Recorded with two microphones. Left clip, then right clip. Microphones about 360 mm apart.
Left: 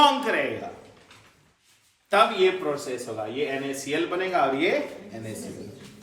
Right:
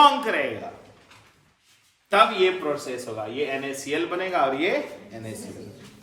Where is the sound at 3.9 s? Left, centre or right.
Right.